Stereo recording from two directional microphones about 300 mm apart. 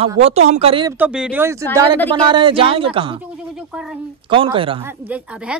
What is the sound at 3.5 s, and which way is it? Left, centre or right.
Speech, centre.